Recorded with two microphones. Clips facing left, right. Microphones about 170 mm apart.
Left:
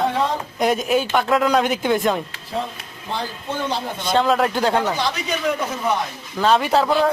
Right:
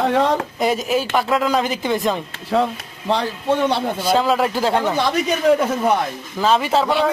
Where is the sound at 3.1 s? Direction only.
75° right (ahead or behind).